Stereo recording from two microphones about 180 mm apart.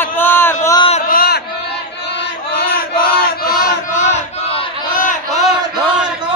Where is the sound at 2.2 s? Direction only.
60° left (ahead or behind).